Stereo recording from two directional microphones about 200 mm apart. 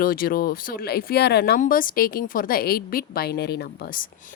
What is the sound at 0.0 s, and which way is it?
A woman's voice, 45° left (ahead or behind).